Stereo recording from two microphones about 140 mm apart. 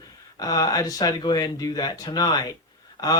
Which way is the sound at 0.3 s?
25° left (ahead or behind).